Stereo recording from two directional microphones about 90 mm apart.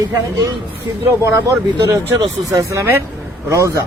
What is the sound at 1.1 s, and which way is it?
Speech, 30° right (ahead or behind).